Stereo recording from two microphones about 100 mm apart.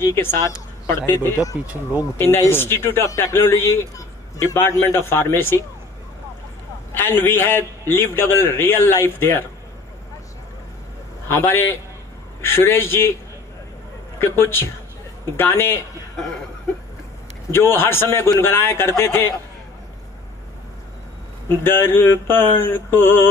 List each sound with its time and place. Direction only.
0.0 s a man's voice: 25° left (ahead or behind)
1.7 s speech: 15° right (ahead or behind)
2.1 s a man's voice: 25° left (ahead or behind)
6.9 s a man's voice: 20° left (ahead or behind)
11.2 s a man's voice: 20° left (ahead or behind)
14.2 s a man's voice: 25° left (ahead or behind)
17.5 s a man's voice: 25° left (ahead or behind)
21.5 s a man's voice: 25° left (ahead or behind)